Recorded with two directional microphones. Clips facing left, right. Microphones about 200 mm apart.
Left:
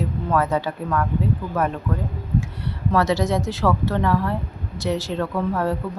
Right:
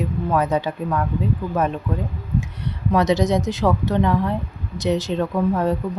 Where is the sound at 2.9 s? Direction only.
20° right (ahead or behind).